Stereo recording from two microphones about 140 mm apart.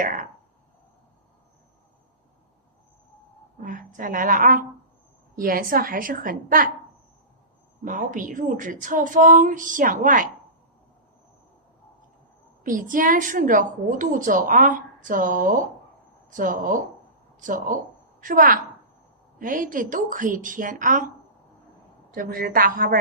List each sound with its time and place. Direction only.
0.0 s a sound: 65° right (ahead or behind)
3.6 s a woman's voice: 70° right (ahead or behind)
5.4 s a woman's voice: 85° right
7.9 s a woman's voice: 65° right (ahead or behind)
12.6 s a woman's voice: 70° right (ahead or behind)
22.1 s a woman's voice: 90° right